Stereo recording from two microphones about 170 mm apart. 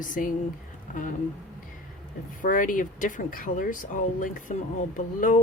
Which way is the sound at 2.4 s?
50° left (ahead or behind).